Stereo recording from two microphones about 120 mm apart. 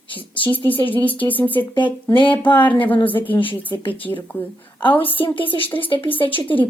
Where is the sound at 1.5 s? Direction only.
40° left (ahead or behind).